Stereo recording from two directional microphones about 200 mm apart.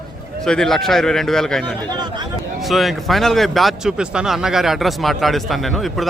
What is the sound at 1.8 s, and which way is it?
Speech, 20° right (ahead or behind).